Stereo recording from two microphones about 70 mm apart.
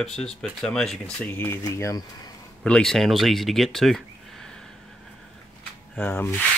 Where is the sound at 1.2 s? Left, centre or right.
Left.